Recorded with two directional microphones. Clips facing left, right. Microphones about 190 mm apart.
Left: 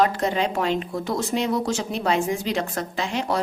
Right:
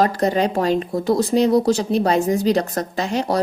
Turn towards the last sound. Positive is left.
turn(degrees=-40)  # may be behind; listen again after turning